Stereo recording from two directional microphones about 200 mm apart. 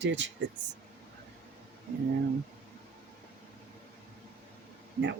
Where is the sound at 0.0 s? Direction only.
60° right (ahead or behind).